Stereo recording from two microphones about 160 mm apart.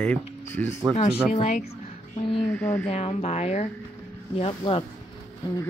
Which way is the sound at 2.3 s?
5° left (ahead or behind).